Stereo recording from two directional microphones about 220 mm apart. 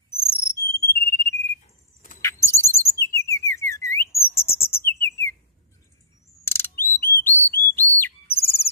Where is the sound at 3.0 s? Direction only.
10° left (ahead or behind).